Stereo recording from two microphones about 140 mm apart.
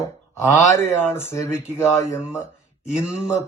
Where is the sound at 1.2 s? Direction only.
20° left (ahead or behind).